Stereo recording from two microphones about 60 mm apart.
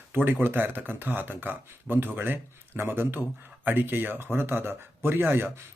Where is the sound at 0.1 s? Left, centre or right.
Right.